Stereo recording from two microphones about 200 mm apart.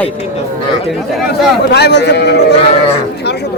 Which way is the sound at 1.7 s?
60° left (ahead or behind).